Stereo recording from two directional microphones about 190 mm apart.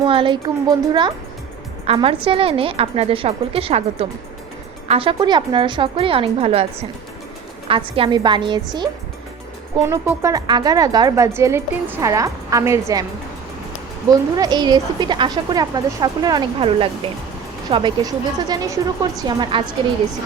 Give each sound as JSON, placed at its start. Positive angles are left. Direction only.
{"t": 0.0, "sound": "a woman's voice", "side_deg": -30}
{"t": 9.7, "sound": "speech", "side_deg": -15}
{"t": 14.1, "sound": "a woman's voice", "side_deg": -20}